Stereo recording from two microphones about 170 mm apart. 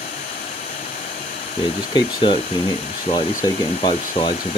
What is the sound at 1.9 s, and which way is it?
Speech, 30° left (ahead or behind).